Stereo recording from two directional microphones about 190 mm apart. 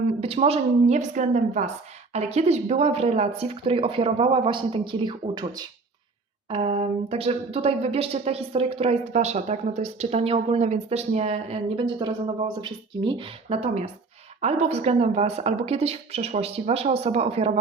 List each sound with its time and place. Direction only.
0.1 s a woman's voice: 30° right (ahead or behind)
6.5 s a woman's voice: 35° right (ahead or behind)